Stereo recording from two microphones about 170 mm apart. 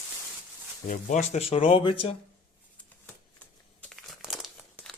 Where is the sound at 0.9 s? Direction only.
45° left (ahead or behind); by 2.0 s 30° left (ahead or behind).